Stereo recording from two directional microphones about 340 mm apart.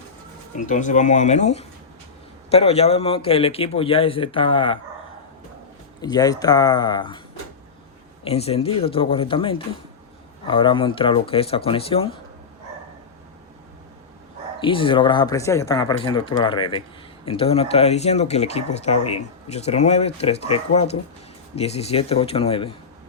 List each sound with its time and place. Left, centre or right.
0.6 s a man's voice: left
6.0 s a man's voice: centre
8.2 s a man's voice: centre
14.6 s a man's voice: centre